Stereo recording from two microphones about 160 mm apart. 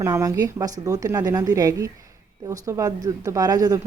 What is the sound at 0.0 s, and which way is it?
Speech, 20° right (ahead or behind).